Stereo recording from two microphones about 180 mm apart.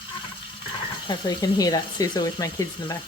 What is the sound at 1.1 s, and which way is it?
Speech, 20° left (ahead or behind).